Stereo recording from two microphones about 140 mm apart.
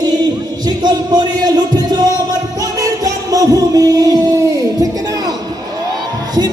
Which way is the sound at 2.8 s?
25° right (ahead or behind).